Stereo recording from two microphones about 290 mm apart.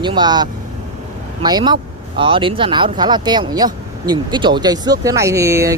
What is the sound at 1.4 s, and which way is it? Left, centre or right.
Speech, centre.